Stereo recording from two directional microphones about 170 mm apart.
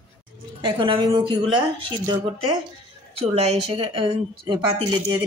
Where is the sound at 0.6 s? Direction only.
30° right (ahead or behind).